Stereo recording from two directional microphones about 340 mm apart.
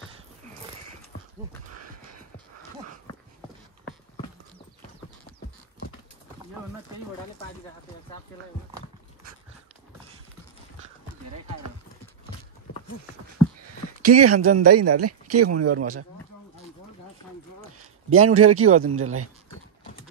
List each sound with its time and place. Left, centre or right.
13.6 s speech: right
18.1 s speech: right